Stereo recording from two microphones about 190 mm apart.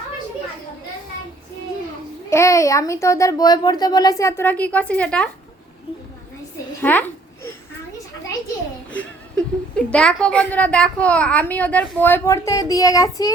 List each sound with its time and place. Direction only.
2.3 s a woman's voice: 15° left (ahead or behind)
6.8 s a sound: 10° left (ahead or behind)
9.0 s a woman's voice: 5° left (ahead or behind)